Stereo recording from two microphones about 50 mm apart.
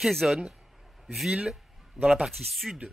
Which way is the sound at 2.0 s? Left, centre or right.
Right.